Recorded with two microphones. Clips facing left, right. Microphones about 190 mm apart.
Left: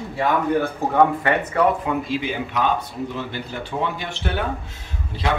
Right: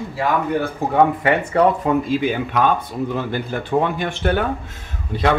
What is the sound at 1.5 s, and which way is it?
Speech, 45° right (ahead or behind).